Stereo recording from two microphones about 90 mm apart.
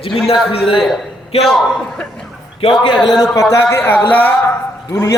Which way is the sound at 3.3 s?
35° left (ahead or behind).